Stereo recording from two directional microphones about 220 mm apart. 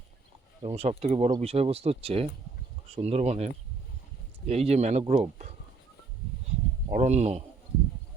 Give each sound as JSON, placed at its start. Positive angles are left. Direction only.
{"t": 0.6, "sound": "speech", "side_deg": -30}
{"t": 6.9, "sound": "speech", "side_deg": -30}